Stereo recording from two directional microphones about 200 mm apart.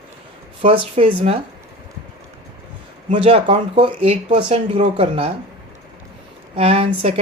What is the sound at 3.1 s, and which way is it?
Speech, 25° right (ahead or behind).